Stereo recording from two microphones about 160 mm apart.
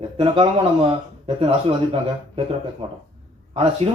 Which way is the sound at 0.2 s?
35° right (ahead or behind).